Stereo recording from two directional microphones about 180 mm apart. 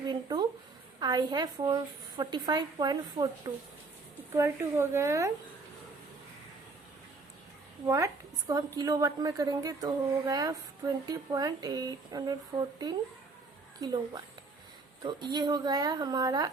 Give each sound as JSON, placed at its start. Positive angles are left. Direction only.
{"t": 0.1, "sound": "a sound", "side_deg": -25}
{"t": 0.9, "sound": "a woman's voice", "side_deg": -20}
{"t": 7.9, "sound": "a woman's voice", "side_deg": -15}